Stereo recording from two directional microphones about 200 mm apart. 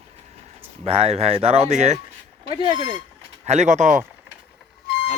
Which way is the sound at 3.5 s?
35° right (ahead or behind).